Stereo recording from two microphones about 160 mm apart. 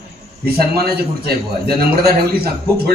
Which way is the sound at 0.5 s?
75° right (ahead or behind).